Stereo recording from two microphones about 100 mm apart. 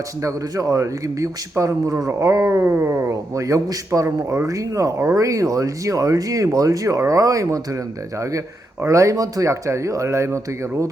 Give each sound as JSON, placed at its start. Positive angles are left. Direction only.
{"t": 0.2, "sound": "a man's voice", "side_deg": -35}
{"t": 8.8, "sound": "a man's voice", "side_deg": -30}